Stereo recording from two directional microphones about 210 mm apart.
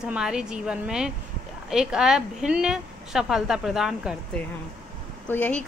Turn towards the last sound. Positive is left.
turn(degrees=10)  # may be behind; listen again after turning